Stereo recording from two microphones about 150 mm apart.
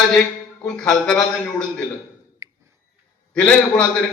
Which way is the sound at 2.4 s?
20° right (ahead or behind).